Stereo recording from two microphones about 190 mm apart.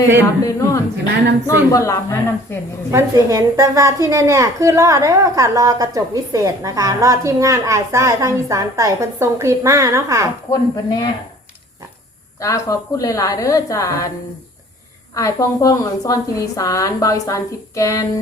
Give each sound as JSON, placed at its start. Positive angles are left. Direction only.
{"t": 0.4, "sound": "a woman's voice", "side_deg": 15}
{"t": 2.9, "sound": "a woman's voice", "side_deg": -15}
{"t": 10.5, "sound": "speech", "side_deg": 20}
{"t": 12.4, "sound": "a woman's voice", "side_deg": 15}
{"t": 15.1, "sound": "a woman's voice", "side_deg": 20}